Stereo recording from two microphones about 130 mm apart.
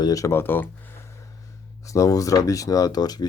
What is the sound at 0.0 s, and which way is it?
Speech, 25° left (ahead or behind).